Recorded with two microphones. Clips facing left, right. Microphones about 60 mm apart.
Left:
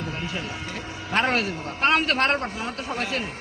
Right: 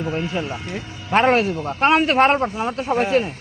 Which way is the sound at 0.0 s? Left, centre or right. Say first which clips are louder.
Right 7 dB; centre.